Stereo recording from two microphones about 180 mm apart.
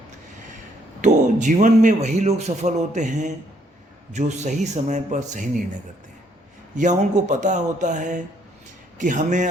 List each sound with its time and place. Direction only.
1.0 s a man's voice: 40° right (ahead or behind)
6.7 s speech: 45° right (ahead or behind)